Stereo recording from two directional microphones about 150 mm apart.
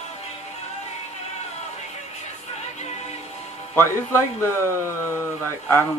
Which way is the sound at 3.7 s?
15° left (ahead or behind).